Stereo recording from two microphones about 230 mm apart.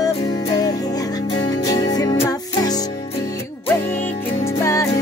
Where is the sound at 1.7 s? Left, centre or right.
Centre.